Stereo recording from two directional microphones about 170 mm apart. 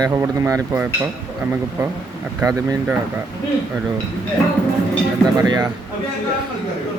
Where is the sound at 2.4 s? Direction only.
20° right (ahead or behind).